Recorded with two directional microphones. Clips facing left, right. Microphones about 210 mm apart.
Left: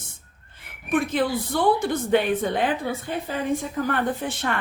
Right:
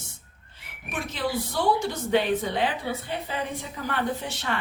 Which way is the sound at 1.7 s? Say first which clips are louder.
Left 3 dB; 55° left (ahead or behind).